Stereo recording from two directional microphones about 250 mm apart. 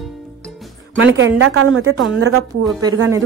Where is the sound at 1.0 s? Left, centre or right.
Right.